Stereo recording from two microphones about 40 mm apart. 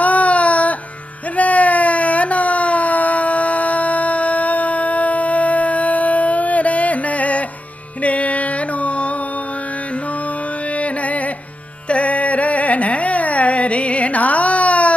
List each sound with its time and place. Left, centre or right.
0.0 s baby cry: left
1.3 s a sound: left
8.0 s music: left
10.7 s carnatic music: left
11.9 s music: left